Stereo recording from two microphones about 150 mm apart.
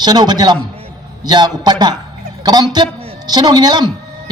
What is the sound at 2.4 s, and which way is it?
A man's voice, 30° right (ahead or behind).